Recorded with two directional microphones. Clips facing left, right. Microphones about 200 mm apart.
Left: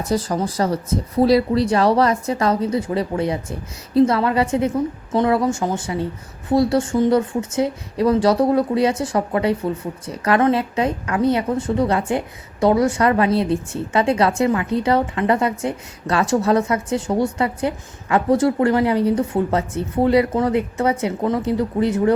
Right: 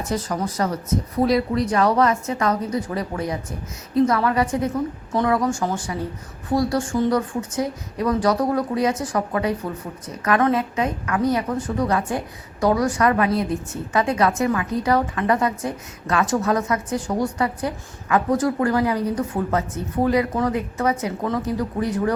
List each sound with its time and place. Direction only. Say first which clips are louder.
0.0 s speech: left 4 dB; 35° left (ahead or behind)